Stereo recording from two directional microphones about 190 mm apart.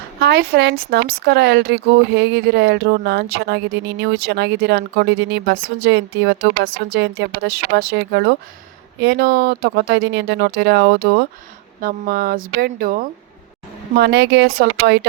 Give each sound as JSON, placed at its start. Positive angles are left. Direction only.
{"t": 0.2, "sound": "a woman's voice", "side_deg": -60}
{"t": 14.0, "sound": "a woman's voice", "side_deg": -60}